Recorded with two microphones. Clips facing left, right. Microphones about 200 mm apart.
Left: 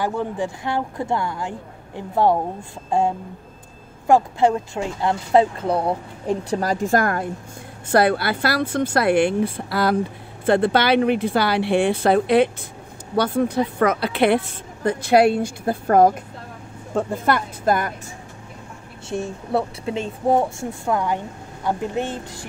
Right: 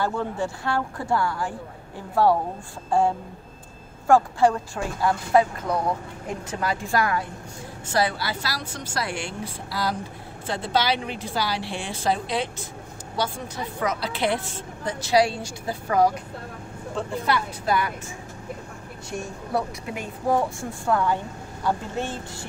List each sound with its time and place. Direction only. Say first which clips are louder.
0.0 s speech: left 2 dB; 15° left (ahead or behind)
4.1 s a woman's voice: left 2 dB; 20° left (ahead or behind); by 17.9 s 50° left (ahead or behind)
19.0 s a woman's voice: left 6 dB; 30° left (ahead or behind)